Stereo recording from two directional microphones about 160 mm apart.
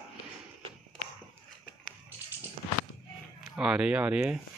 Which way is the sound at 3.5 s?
5° right (ahead or behind).